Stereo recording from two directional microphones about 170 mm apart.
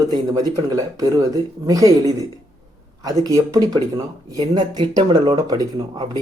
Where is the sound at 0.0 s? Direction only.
20° right (ahead or behind).